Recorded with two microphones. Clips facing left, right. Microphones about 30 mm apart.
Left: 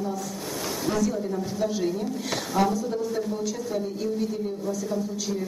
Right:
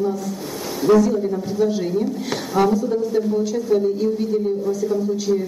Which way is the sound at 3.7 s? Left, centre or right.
Centre.